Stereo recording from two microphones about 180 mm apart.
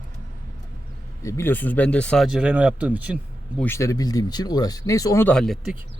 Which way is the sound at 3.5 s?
15° left (ahead or behind).